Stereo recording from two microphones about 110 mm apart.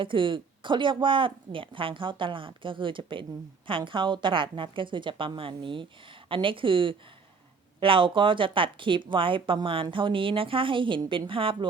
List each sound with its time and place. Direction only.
0.0 s speech: 50° right (ahead or behind)